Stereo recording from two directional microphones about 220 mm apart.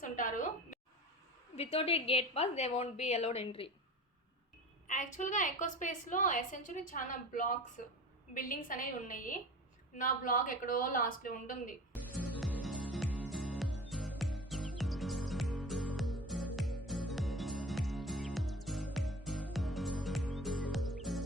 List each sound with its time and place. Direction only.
0.0 s a sound: 35° left (ahead or behind)
1.5 s a woman's voice: 25° left (ahead or behind)
4.9 s a woman's voice: 35° left (ahead or behind)
12.1 s music: 5° left (ahead or behind)